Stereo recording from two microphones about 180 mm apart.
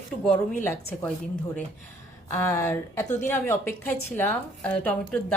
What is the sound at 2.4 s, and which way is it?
A woman's voice, 15° left (ahead or behind).